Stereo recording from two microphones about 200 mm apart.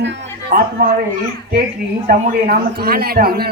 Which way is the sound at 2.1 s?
50° right (ahead or behind).